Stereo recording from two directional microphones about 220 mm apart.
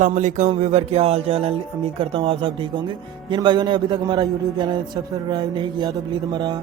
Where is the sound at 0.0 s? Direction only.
35° right (ahead or behind).